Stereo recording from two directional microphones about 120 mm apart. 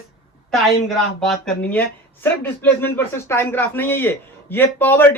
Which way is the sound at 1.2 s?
5° left (ahead or behind).